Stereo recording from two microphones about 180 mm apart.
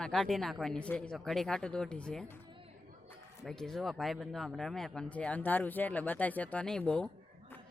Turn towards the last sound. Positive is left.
turn(degrees=5)  # may be behind; listen again after turning